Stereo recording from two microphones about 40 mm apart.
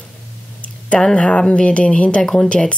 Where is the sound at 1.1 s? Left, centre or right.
Left.